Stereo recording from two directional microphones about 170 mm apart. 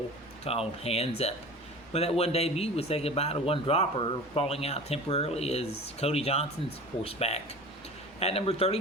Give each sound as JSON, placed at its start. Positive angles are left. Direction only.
{"t": 0.5, "sound": "speech", "side_deg": 35}